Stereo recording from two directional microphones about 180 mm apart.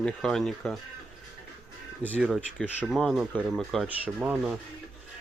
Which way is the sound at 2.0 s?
10° right (ahead or behind).